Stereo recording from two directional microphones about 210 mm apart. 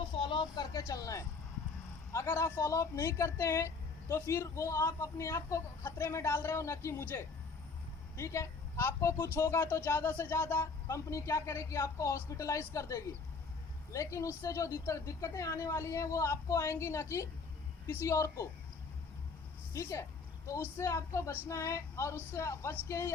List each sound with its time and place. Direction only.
0.2 s a sound: 20° left (ahead or behind)
2.1 s speech: 15° left (ahead or behind)
19.7 s speech: 15° left (ahead or behind)